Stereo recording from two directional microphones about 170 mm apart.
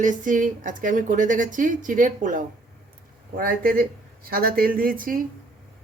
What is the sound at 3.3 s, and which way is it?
Speech, 60° right (ahead or behind).